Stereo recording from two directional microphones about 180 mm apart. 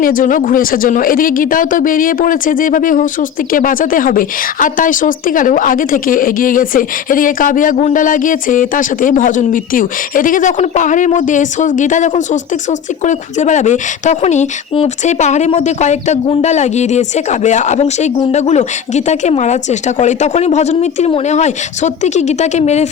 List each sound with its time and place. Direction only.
0.0 s speech: 50° left (ahead or behind)